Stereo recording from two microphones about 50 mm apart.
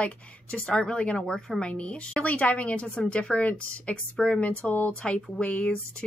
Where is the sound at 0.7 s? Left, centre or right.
Centre.